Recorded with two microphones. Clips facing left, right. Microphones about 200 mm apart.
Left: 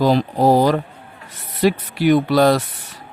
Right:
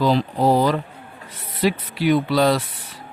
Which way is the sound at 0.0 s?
45° left (ahead or behind).